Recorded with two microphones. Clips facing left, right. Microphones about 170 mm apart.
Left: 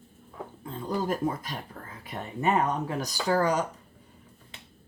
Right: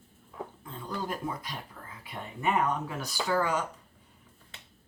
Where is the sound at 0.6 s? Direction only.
45° left (ahead or behind).